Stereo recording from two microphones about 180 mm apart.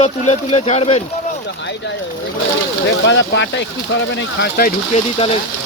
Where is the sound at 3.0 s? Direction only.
90° left.